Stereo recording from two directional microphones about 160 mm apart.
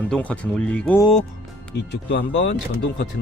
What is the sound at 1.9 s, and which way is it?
Speech, 90° left.